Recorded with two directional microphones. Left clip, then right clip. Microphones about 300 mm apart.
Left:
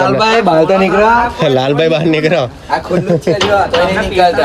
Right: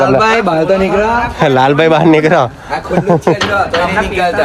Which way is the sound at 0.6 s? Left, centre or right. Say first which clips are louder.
Left 2 dB; centre.